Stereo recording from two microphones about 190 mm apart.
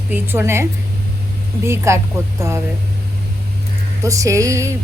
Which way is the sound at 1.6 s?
15° right (ahead or behind).